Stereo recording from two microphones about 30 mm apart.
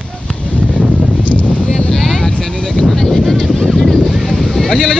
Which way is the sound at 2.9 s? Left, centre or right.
Centre.